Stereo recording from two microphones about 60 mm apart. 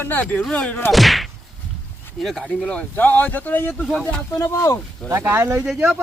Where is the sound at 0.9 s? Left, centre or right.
Centre.